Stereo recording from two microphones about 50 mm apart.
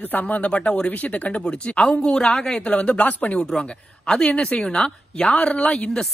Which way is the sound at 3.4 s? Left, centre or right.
Centre.